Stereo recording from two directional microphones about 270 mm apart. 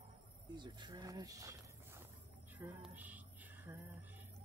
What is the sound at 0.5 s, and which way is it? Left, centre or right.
Speech, centre.